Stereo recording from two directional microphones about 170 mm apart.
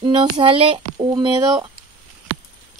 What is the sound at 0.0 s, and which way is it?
A child's voice, 30° right (ahead or behind).